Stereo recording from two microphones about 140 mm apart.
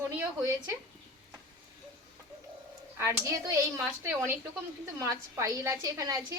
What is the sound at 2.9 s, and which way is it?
Speech, 20° right (ahead or behind).